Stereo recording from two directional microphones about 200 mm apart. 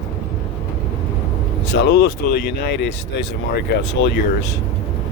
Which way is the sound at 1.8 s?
60° left (ahead or behind).